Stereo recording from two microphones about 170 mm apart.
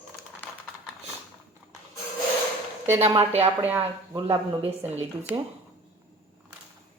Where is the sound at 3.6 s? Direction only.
10° right (ahead or behind).